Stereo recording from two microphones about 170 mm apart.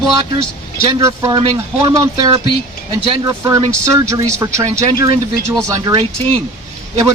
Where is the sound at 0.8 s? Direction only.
20° right (ahead or behind).